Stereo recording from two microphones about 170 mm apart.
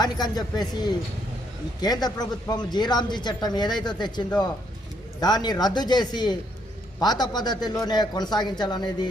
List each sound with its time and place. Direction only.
0.0 s speech: 25° left (ahead or behind)